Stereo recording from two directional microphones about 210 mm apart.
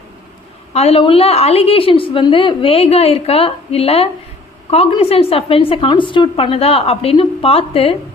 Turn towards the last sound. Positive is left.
turn(degrees=25)  # may be behind; listen again after turning